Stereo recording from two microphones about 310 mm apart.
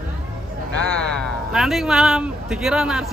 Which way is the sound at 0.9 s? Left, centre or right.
Centre.